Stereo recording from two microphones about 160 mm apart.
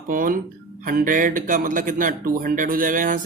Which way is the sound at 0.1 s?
60° right (ahead or behind).